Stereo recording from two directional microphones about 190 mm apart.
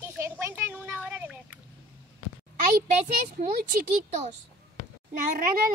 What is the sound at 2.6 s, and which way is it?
Speech, 50° right (ahead or behind).